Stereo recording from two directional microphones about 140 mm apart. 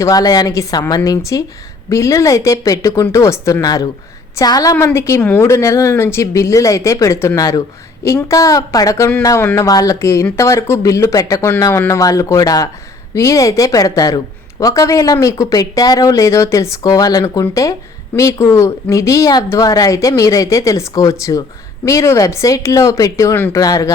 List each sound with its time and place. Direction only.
0.0 s speech: 25° left (ahead or behind)